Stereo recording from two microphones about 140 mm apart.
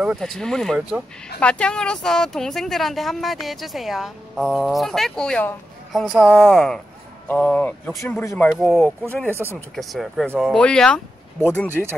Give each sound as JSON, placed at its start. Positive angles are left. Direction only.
{"t": 0.0, "sound": "speech", "side_deg": 0}
{"t": 1.4, "sound": "speech", "side_deg": 10}
{"t": 8.5, "sound": "speech", "side_deg": 0}
{"t": 9.3, "sound": "speech", "side_deg": -15}
{"t": 9.8, "sound": "speech", "side_deg": 0}